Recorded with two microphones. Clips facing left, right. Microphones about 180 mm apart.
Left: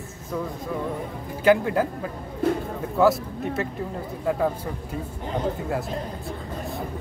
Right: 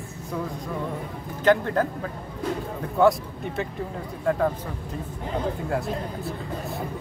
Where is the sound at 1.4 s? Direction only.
10° left (ahead or behind).